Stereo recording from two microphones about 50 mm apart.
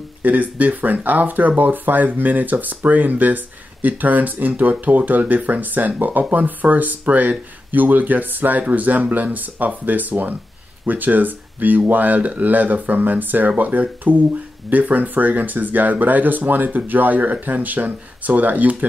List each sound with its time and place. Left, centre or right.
0.2 s speech: right